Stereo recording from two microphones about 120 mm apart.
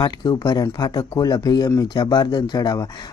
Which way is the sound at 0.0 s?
35° left (ahead or behind).